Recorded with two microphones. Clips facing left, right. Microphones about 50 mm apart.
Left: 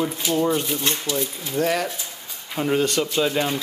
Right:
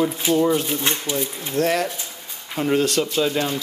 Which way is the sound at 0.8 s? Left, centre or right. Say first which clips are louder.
Right 1 dB; right.